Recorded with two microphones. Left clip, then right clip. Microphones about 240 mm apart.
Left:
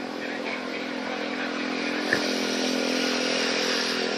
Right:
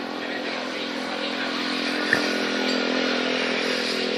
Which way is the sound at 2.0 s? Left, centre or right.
Centre.